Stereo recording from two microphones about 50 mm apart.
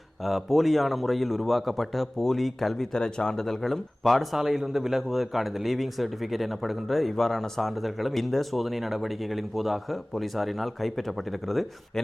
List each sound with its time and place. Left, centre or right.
0.3 s a man's voice: centre